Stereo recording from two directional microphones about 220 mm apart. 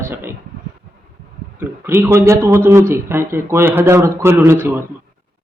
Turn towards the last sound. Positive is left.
turn(degrees=-10)  # may be behind; listen again after turning